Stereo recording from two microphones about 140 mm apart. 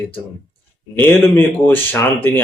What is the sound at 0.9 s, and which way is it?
Speech, 15° left (ahead or behind).